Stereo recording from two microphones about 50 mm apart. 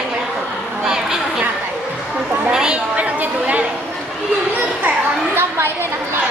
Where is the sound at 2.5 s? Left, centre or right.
Centre.